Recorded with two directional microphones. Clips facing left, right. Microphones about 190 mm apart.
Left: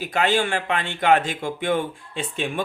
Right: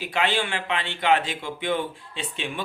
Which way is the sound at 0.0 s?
45° left (ahead or behind).